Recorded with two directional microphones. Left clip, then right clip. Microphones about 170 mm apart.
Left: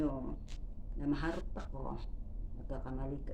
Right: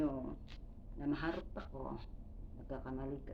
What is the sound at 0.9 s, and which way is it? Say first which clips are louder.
Speech: left 2 dB; 15° left (ahead or behind).